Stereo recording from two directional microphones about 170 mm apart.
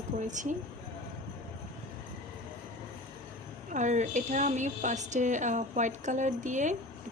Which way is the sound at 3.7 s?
45° right (ahead or behind).